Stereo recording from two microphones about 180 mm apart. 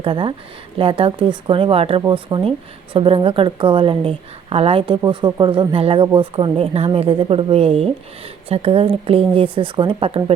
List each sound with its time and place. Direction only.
0.0 s a woman's voice: 30° right (ahead or behind)